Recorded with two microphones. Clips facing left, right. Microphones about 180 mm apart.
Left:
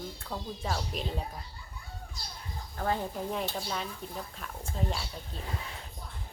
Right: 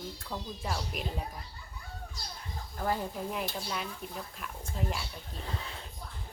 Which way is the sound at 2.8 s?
30° left (ahead or behind).